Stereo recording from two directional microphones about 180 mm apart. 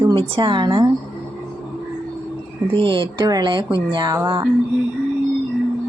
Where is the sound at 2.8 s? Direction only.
25° right (ahead or behind).